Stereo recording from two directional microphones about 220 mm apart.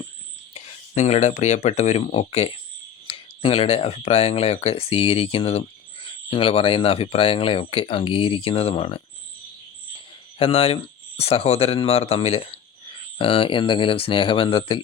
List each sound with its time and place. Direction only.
0.5 s speech: 30° left (ahead or behind)
10.3 s speech: 25° left (ahead or behind)